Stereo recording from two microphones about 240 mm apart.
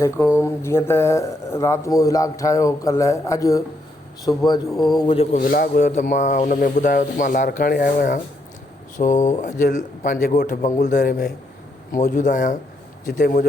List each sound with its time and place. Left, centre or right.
0.3 s speech: centre
5.4 s speech: left